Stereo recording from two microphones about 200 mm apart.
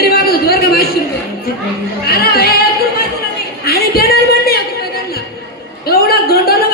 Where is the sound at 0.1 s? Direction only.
50° left (ahead or behind).